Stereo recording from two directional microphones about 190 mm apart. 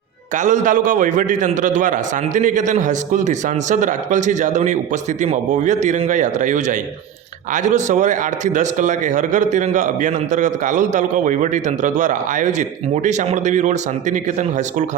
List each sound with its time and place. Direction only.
0.3 s a man's voice: 40° right (ahead or behind)